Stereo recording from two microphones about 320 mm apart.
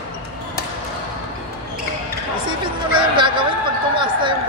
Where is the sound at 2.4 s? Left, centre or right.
Centre.